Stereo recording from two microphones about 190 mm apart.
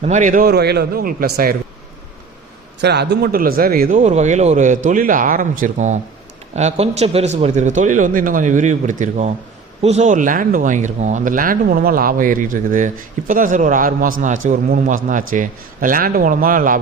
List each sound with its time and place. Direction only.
0.0 s speech: 40° right (ahead or behind)
2.8 s a man's voice: 60° right (ahead or behind)